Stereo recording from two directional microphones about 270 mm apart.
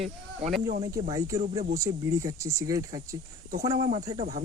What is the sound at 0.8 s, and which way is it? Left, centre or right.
Speech, centre.